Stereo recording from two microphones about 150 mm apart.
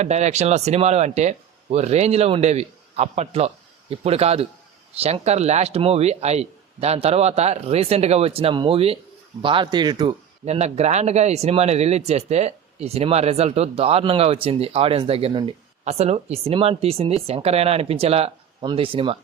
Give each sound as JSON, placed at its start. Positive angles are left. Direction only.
{"t": 0.0, "sound": "speech", "side_deg": -50}
{"t": 10.4, "sound": "speech", "side_deg": -45}
{"t": 15.8, "sound": "speech", "side_deg": -45}